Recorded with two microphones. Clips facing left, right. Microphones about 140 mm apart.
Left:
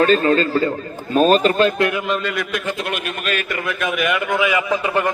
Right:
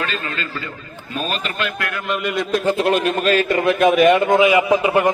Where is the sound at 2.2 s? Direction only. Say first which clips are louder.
Right 4 dB; 25° right (ahead or behind).